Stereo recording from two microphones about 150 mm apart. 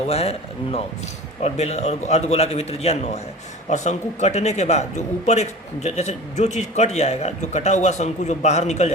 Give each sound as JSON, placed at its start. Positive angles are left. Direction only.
{"t": 0.1, "sound": "a man's voice", "side_deg": 40}